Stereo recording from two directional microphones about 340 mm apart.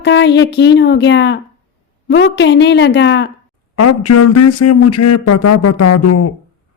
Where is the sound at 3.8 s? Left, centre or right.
Left.